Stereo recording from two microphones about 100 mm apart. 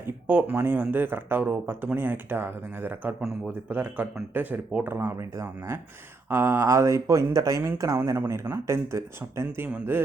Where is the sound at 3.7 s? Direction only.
15° right (ahead or behind).